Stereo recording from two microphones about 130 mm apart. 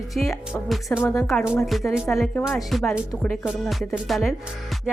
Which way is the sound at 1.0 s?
20° left (ahead or behind).